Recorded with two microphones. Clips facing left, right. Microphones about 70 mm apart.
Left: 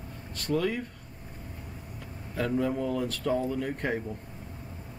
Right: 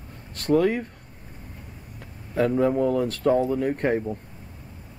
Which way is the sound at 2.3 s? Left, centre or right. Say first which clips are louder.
Right 7 dB; right.